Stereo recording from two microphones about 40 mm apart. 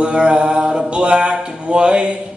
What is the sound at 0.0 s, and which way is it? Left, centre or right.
Mantra, right.